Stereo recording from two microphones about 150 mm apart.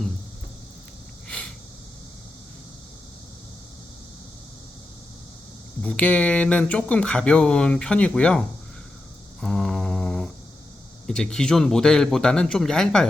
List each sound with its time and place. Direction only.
5.8 s speech: 10° left (ahead or behind)
9.4 s a sound: 5° left (ahead or behind)
11.0 s a man's voice: 5° left (ahead or behind)